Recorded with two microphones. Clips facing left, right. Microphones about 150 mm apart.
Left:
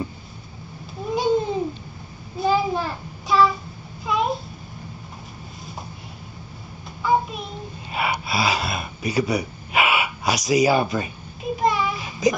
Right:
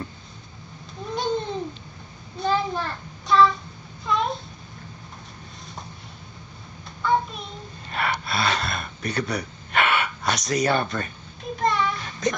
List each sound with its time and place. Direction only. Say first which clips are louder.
1.0 s babbling: left 5 dB; 5° left (ahead or behind)
2.3 s child singing: left 3 dB; 5° left (ahead or behind)
4.0 s a sound: left 2 dB; 5° left (ahead or behind)
7.0 s child singing: left 2 dB; 5° left (ahead or behind)
7.9 s gasp: left 2 dB; 5° left (ahead or behind)